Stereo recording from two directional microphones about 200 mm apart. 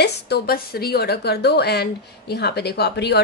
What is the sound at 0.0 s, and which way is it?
A woman's voice, 50° left (ahead or behind).